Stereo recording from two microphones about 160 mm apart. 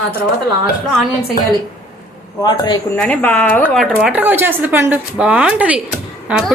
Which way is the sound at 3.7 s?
Centre (ahead or behind).